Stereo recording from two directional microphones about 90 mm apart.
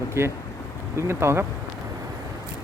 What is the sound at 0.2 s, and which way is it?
Speech, 25° right (ahead or behind).